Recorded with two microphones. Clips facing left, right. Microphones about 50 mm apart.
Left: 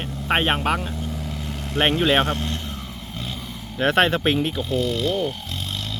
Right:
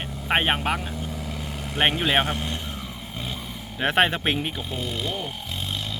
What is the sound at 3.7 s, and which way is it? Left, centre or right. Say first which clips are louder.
Speech: left 3 dB; centre.